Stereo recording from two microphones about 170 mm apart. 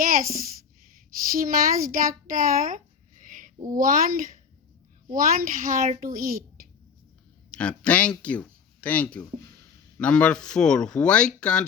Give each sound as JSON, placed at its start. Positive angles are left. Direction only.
{"t": 0.0, "sound": "a sound", "side_deg": -55}
{"t": 3.8, "sound": "speech", "side_deg": -55}
{"t": 7.5, "sound": "speech", "side_deg": 5}